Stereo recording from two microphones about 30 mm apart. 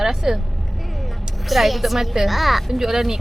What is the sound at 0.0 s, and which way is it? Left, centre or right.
Speech, centre.